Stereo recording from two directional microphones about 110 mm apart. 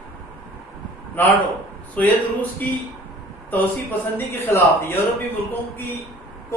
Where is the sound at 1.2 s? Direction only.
15° left (ahead or behind).